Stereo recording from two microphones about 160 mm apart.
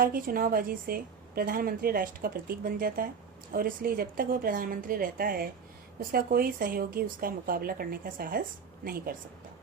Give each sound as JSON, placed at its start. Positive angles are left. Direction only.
{"t": 0.0, "sound": "a woman's voice", "side_deg": -65}